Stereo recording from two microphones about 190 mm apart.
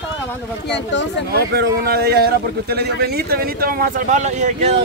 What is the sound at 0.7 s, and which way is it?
Speech, 65° left (ahead or behind).